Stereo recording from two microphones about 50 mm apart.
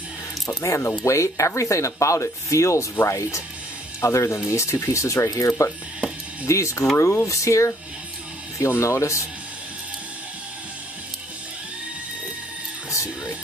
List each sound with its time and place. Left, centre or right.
0.5 s speech: left
4.5 s speech: left
7.0 s speech: left
8.5 s speech: left
12.9 s music: left